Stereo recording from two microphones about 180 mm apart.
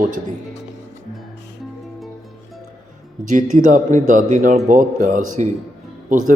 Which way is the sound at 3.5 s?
45° right (ahead or behind).